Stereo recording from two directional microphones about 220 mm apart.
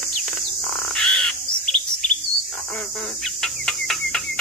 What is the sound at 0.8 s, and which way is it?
Bird, 5° left (ahead or behind).